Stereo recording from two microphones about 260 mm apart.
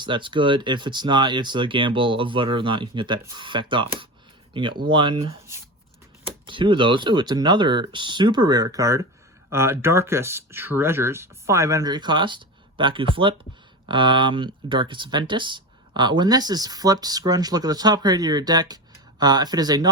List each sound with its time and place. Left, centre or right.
0.0 s speech: centre
6.4 s speech: centre